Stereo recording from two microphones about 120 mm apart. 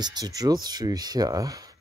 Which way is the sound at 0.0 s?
35° right (ahead or behind).